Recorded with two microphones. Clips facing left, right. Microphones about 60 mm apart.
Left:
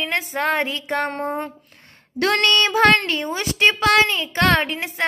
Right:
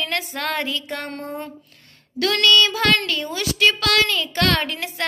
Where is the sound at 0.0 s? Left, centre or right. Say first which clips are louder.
Left 3 dB; left.